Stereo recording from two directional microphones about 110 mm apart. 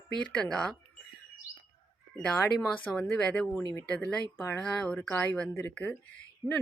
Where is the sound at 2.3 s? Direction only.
20° left (ahead or behind).